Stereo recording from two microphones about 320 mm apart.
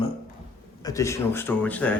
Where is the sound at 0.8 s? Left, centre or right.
Centre.